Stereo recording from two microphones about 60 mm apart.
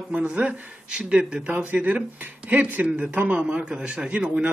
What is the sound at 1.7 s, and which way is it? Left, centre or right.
A man's voice, right.